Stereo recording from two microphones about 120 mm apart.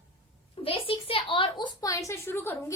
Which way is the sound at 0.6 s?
50° left (ahead or behind).